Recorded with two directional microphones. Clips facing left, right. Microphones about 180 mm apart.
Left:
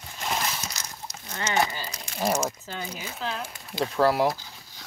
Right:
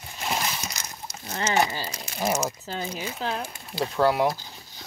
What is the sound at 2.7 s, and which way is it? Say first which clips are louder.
Speech: right 4 dB; 40° right (ahead or behind).